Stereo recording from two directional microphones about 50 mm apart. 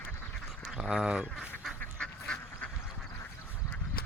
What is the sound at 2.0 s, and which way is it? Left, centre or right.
Duck, centre.